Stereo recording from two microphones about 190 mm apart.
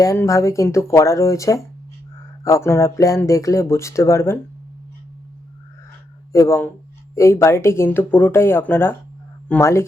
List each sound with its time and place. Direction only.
0.0 s speech: 15° left (ahead or behind)
6.3 s speech: 15° left (ahead or behind)